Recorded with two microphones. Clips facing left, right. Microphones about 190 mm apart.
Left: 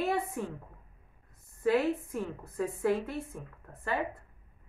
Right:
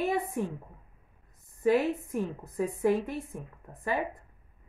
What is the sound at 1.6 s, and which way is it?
A woman's voice, 15° right (ahead or behind).